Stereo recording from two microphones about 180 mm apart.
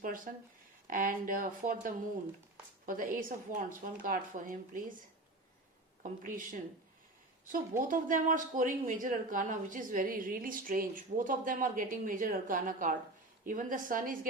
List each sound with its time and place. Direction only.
0.0 s speech: 50° right (ahead or behind)
6.0 s speech: 50° right (ahead or behind)
7.8 s speech: 50° right (ahead or behind)